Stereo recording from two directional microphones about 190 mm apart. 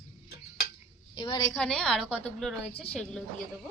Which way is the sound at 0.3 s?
60° left (ahead or behind).